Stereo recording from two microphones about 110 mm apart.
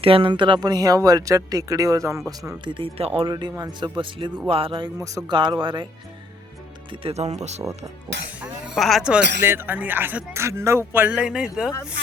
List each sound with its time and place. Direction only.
0.0 s speech: 55° right (ahead or behind); by 2.2 s 30° right (ahead or behind)
2.6 s speech: 50° right (ahead or behind)
3.6 s speech: 35° right (ahead or behind)
4.4 s speech: 60° right (ahead or behind)
7.0 s speech: 85° right
8.7 s speech: centre (ahead or behind)
9.4 s speech: 20° right (ahead or behind)